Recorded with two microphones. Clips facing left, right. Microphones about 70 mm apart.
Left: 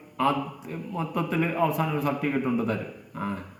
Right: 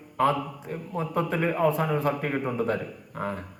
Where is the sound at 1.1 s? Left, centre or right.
Right.